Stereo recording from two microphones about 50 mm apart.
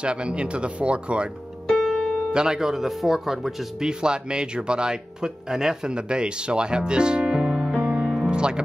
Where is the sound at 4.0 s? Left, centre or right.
Centre.